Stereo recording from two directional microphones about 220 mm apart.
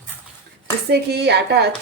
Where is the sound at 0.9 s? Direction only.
50° right (ahead or behind).